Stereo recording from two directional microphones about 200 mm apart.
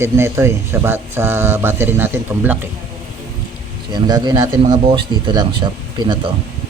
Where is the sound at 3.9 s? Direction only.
20° right (ahead or behind).